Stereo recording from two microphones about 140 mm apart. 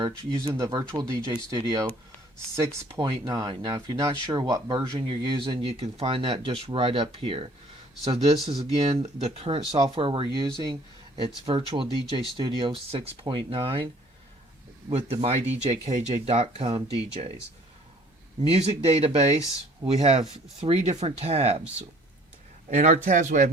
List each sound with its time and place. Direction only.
0.3 s speech: 25° right (ahead or behind)
3.0 s speech: 30° right (ahead or behind)
11.4 s speech: 40° right (ahead or behind)
14.9 s speech: 45° right (ahead or behind)
18.5 s speech: 45° right (ahead or behind)
22.7 s speech: 55° right (ahead or behind)